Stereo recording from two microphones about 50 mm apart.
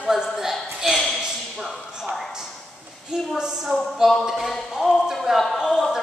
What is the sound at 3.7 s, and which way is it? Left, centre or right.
Speech, right.